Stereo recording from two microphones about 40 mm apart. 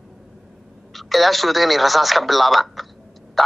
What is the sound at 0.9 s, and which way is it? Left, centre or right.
Speech, centre.